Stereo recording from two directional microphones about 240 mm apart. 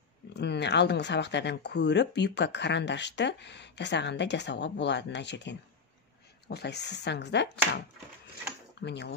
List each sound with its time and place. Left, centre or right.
0.3 s speech: left